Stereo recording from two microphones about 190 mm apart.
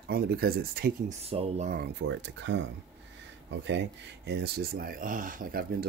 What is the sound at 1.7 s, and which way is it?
Speech, 60° right (ahead or behind).